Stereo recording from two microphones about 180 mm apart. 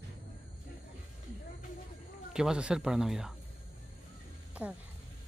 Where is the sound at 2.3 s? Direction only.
5° right (ahead or behind).